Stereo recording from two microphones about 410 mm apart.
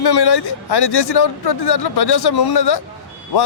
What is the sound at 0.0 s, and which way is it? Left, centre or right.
A man's voice, left.